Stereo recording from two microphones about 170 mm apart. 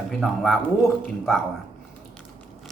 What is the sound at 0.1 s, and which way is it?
Speech, centre (ahead or behind).